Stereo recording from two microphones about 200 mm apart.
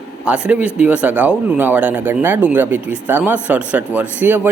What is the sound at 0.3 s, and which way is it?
Speech, 5° right (ahead or behind).